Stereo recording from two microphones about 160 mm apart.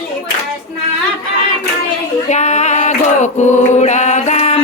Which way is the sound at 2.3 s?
45° left (ahead or behind).